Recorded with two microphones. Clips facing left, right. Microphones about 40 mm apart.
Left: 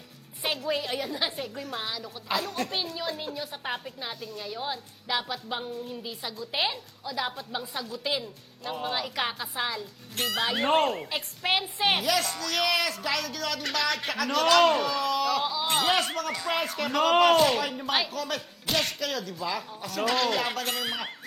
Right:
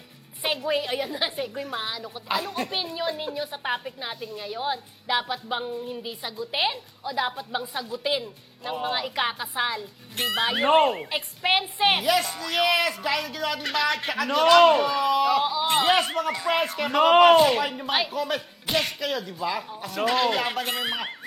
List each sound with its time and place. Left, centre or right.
0.4 s a woman's voice: centre